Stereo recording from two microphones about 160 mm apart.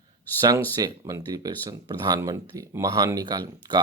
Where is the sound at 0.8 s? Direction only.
20° right (ahead or behind).